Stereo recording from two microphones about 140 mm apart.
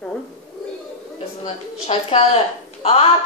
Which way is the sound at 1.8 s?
45° left (ahead or behind).